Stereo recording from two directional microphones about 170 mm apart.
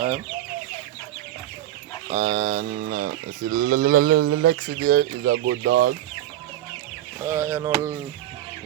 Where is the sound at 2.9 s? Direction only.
60° right (ahead or behind); by 5.9 s 80° right.